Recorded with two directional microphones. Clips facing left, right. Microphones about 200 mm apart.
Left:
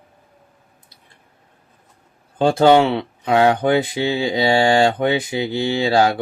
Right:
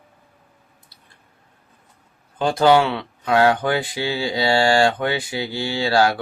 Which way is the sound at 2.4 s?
25° left (ahead or behind).